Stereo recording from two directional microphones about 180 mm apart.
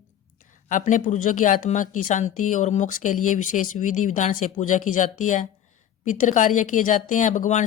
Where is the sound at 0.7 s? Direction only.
45° left (ahead or behind).